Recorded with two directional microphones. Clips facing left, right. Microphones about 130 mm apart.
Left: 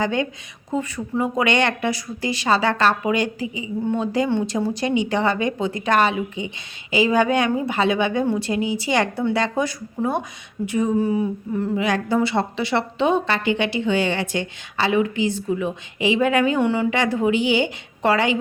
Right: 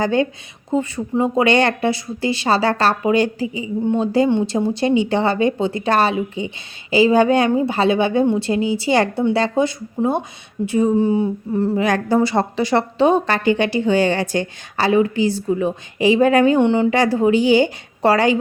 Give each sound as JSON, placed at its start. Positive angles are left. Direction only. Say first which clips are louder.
{"t": 0.0, "sound": "a woman's voice", "louder": "right 4 dB", "side_deg": -35}
{"t": 11.9, "sound": "a woman's voice", "louder": "right 3 dB", "side_deg": -45}
{"t": 16.6, "sound": "a woman's voice", "louder": "right 5 dB", "side_deg": -25}